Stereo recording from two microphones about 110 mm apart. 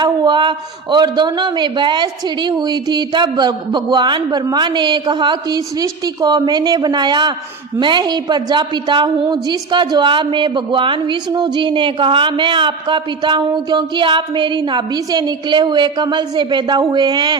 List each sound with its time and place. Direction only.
0.0 s a woman's voice: 45° right (ahead or behind)